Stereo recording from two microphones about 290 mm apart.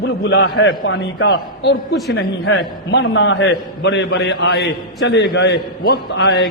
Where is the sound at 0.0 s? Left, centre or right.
Left.